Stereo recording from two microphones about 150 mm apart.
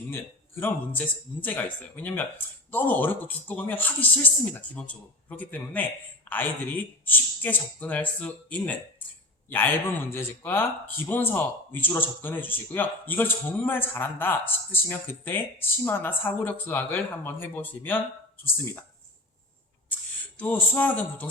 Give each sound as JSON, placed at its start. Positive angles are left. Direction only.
{"t": 0.1, "sound": "speech", "side_deg": 15}
{"t": 20.4, "sound": "speech", "side_deg": 10}